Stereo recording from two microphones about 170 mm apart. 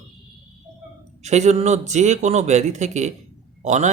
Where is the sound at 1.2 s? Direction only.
40° right (ahead or behind).